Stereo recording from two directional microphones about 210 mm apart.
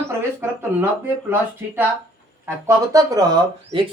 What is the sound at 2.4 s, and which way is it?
Speech, 15° right (ahead or behind).